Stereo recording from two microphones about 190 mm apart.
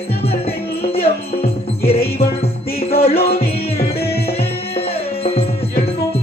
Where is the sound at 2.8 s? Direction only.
30° left (ahead or behind).